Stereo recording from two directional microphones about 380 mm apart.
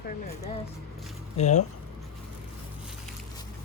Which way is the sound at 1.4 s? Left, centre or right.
Centre.